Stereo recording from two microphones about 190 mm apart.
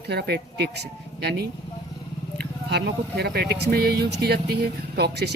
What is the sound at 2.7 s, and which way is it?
Speech, 60° right (ahead or behind).